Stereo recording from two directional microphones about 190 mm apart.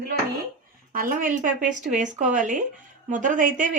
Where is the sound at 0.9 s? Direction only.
45° right (ahead or behind).